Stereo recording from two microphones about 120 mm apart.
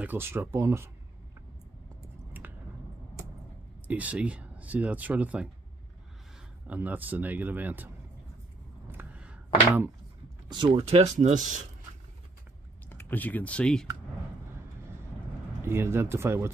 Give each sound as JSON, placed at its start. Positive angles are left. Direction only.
{"t": 0.0, "sound": "speech", "side_deg": -15}
{"t": 2.4, "sound": "squish", "side_deg": -15}
{"t": 3.8, "sound": "speech", "side_deg": -10}
{"t": 6.7, "sound": "speech", "side_deg": -15}
{"t": 8.9, "sound": "a sound", "side_deg": -10}
{"t": 10.5, "sound": "speech", "side_deg": -40}
{"t": 11.0, "sound": "speech", "side_deg": -70}
{"t": 12.9, "sound": "speech", "side_deg": 15}
{"t": 15.6, "sound": "speech", "side_deg": -20}